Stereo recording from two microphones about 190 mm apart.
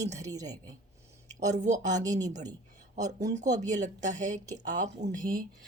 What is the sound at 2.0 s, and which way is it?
Speech, 20° right (ahead or behind).